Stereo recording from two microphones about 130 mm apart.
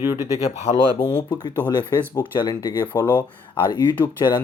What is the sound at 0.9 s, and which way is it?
Speech, 35° left (ahead or behind).